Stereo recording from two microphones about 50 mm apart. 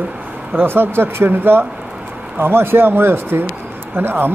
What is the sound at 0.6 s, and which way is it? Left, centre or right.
Speech, right.